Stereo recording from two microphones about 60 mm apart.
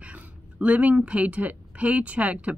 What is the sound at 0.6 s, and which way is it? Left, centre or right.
Speech, right.